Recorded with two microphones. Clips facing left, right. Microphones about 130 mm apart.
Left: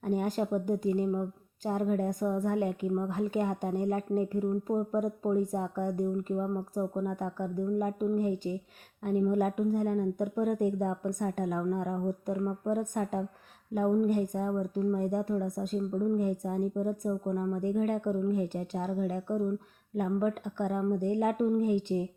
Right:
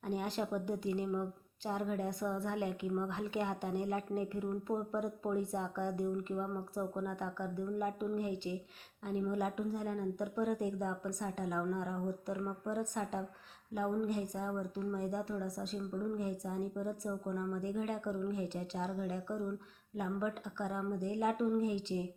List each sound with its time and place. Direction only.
0.0 s speech: 45° left (ahead or behind)
4.4 s speech: 30° left (ahead or behind)
5.3 s speech: 45° left (ahead or behind)
6.3 s speech: 30° left (ahead or behind); by 17.1 s 50° left (ahead or behind)
17.1 s speech: 40° left (ahead or behind)